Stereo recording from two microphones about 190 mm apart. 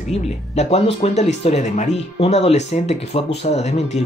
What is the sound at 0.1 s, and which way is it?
Speech, 35° left (ahead or behind).